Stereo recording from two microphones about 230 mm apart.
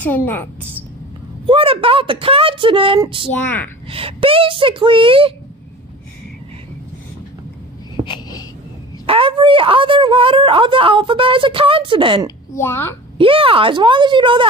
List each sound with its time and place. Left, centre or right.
0.0 s a woman's voice: centre
1.4 s speech: right
3.3 s a woman's voice: centre
3.8 s speech: right
8.0 s wheeze: centre
9.0 s speech: right
12.5 s a woman's voice: centre
13.2 s speech: right